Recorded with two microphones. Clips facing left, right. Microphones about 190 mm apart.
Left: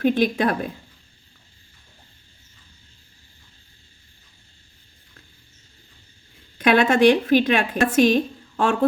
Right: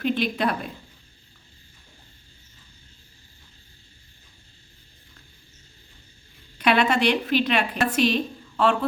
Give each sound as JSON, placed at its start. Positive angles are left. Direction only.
{"t": 0.0, "sound": "a woman's voice", "side_deg": 50}
{"t": 6.6, "sound": "a woman's voice", "side_deg": 50}